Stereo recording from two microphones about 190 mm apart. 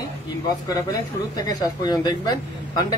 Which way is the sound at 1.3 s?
20° left (ahead or behind).